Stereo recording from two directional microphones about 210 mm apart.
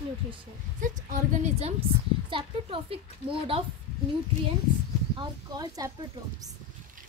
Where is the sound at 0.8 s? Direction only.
40° right (ahead or behind).